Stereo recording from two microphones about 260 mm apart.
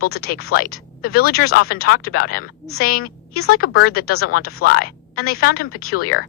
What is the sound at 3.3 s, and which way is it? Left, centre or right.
Speech, left.